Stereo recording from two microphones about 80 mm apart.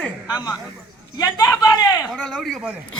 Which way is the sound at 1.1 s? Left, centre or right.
Left.